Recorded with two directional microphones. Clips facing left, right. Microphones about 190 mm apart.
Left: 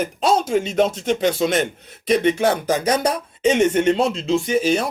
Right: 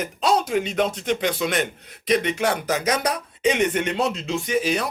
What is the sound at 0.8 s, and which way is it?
Speech, 25° left (ahead or behind).